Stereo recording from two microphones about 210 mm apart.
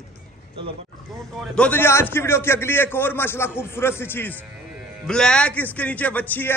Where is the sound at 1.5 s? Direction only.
5° left (ahead or behind).